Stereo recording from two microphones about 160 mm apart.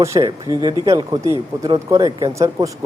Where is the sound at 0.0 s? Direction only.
20° right (ahead or behind).